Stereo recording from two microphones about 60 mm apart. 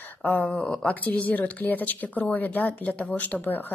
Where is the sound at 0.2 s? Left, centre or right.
Left.